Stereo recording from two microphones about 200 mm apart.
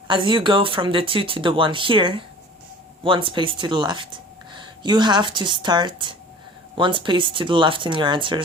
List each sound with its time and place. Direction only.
0.1 s speech: 25° right (ahead or behind)